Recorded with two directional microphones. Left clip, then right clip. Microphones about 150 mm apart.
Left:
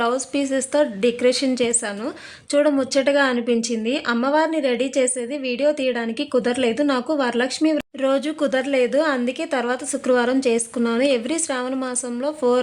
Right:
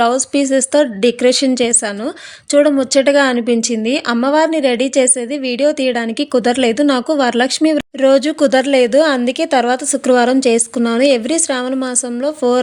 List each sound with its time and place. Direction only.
0.0 s speech: 35° right (ahead or behind)